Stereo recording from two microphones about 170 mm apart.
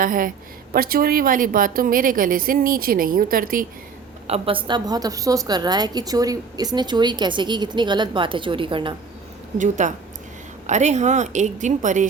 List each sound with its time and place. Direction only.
0.0 s a woman's voice: 55° right (ahead or behind)
4.3 s a woman's voice: 30° right (ahead or behind)
9.6 s a woman's voice: 45° right (ahead or behind)